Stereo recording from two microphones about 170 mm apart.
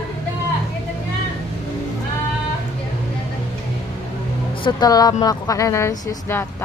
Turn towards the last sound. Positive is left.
turn(degrees=15)  # may be behind; listen again after turning